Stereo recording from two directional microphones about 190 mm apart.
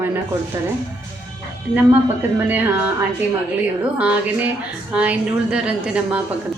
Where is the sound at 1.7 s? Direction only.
10° right (ahead or behind).